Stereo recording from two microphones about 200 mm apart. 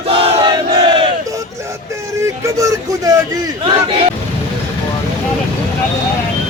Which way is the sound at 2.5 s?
15° right (ahead or behind).